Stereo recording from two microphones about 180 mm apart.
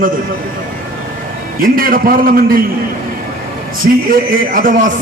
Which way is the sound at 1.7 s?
55° right (ahead or behind).